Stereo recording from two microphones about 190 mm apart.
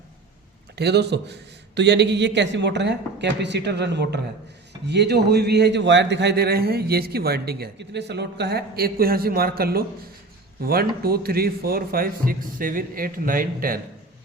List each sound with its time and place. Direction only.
0.8 s a man's voice: 60° right (ahead or behind)